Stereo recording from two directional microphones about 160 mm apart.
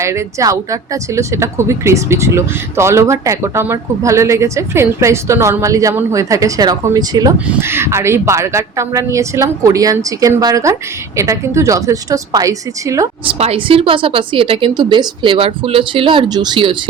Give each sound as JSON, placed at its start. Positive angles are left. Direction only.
{"t": 0.0, "sound": "speech", "side_deg": -20}
{"t": 7.4, "sound": "speech", "side_deg": -10}
{"t": 13.2, "sound": "speech", "side_deg": -35}